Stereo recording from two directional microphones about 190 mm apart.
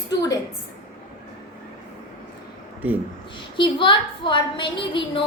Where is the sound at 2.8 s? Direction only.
10° right (ahead or behind).